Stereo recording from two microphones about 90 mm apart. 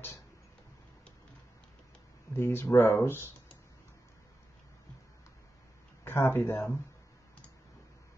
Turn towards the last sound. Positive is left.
turn(degrees=30)  # may be behind; listen again after turning